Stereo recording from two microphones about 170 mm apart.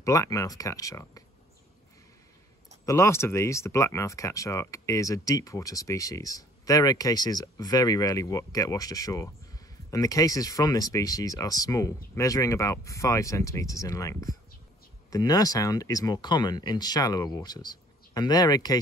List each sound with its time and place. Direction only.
0.0 s speech: 20° left (ahead or behind)
2.8 s speech: 20° left (ahead or behind)